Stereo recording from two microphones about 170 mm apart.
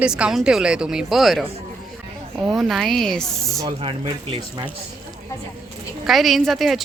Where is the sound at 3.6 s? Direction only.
30° right (ahead or behind).